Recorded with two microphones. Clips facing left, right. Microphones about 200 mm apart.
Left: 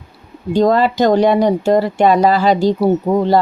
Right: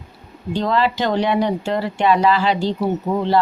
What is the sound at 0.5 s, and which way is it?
Speech, 45° left (ahead or behind).